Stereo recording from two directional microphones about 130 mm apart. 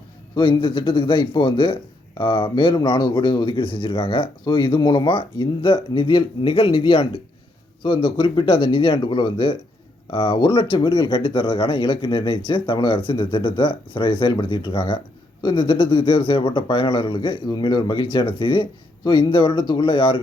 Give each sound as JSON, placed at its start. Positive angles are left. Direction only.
{"t": 0.3, "sound": "speech", "side_deg": 40}